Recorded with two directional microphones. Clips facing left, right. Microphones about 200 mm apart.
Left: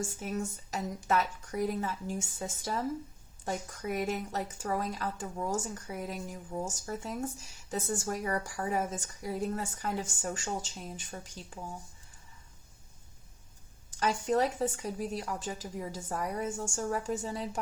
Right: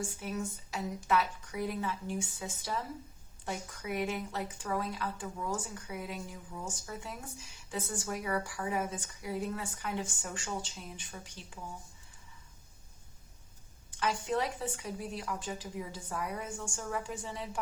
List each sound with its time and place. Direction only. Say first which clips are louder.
0.0 s speech: left 2 dB; 45° left (ahead or behind)
13.9 s speech: left 4 dB; 40° left (ahead or behind)